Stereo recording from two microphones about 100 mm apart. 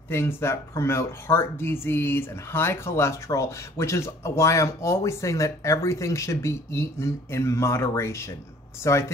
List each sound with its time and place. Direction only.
0.1 s speech: 25° left (ahead or behind)